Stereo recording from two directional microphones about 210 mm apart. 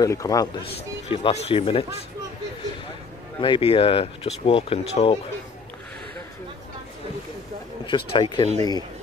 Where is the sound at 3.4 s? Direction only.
25° left (ahead or behind).